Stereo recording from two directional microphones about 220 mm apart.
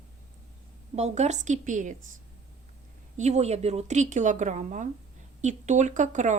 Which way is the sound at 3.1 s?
30° right (ahead or behind).